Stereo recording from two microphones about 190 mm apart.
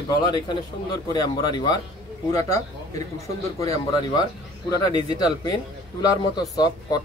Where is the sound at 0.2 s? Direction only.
25° left (ahead or behind).